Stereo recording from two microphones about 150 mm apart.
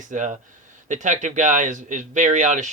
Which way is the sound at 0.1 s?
55° right (ahead or behind).